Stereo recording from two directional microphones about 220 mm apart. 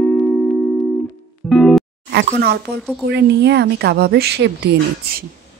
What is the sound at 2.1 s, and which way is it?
Speech, 50° right (ahead or behind).